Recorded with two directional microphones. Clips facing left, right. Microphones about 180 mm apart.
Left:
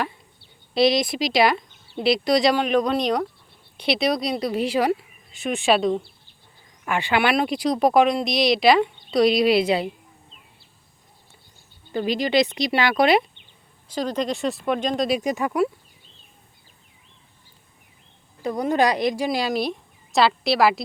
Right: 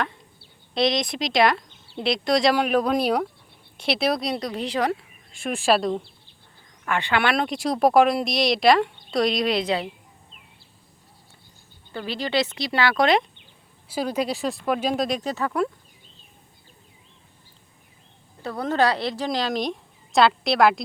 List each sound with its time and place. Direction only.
0.7 s speech: 5° left (ahead or behind)
6.8 s speech: 15° left (ahead or behind)
11.9 s speech: 15° left (ahead or behind)
13.8 s speech: 10° right (ahead or behind)
15.2 s speech: 15° left (ahead or behind)
18.4 s speech: 15° left (ahead or behind)